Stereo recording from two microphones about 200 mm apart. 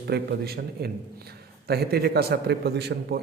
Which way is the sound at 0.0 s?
55° right (ahead or behind).